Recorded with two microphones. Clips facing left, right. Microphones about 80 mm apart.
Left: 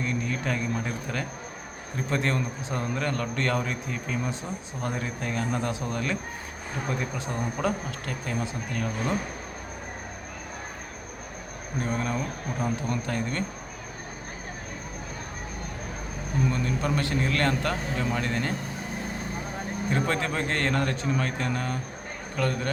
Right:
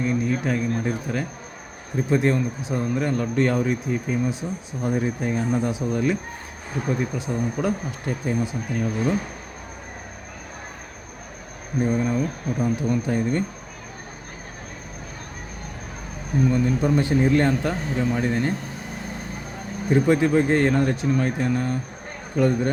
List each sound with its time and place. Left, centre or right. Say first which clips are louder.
0.0 s speech: right 6 dB; centre
7.9 s speech: right 6 dB; centre
11.8 s speech: right 7 dB; centre
16.5 s speech: right 9 dB; centre
19.9 s speech: right 10 dB; centre
22.4 s a man's voice: right 8 dB; centre